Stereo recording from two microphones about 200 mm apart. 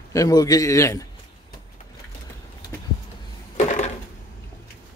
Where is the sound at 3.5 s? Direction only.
35° left (ahead or behind).